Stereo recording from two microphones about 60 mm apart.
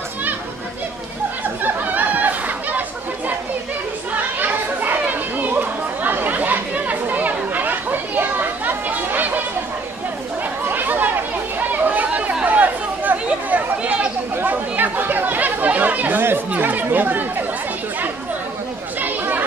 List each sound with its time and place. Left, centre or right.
1.6 s chatter: right
4.4 s chatter: right
10.7 s chatter: right
18.9 s chatter: right